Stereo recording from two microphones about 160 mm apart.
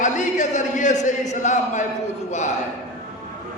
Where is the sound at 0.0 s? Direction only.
50° left (ahead or behind).